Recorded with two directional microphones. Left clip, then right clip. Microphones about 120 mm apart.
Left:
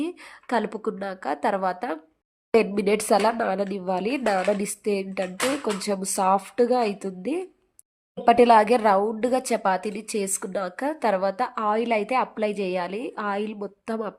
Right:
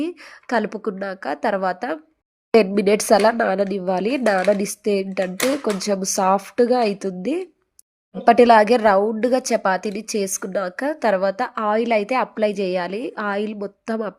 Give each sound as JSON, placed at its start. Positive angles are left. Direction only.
{"t": 0.0, "sound": "a woman's voice", "side_deg": -25}